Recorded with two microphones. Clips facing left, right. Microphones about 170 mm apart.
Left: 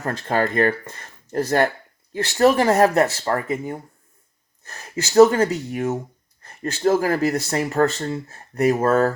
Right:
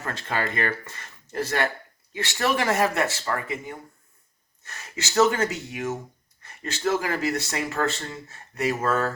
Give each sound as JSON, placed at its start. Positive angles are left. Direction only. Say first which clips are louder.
{"t": 0.0, "sound": "speech", "louder": "left 7 dB", "side_deg": 40}
{"t": 6.6, "sound": "speech", "louder": "left 6 dB", "side_deg": 45}